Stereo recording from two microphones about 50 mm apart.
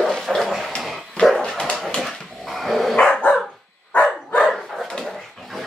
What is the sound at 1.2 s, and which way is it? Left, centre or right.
Dog, centre.